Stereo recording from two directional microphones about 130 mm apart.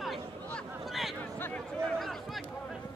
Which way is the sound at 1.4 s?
15° left (ahead or behind).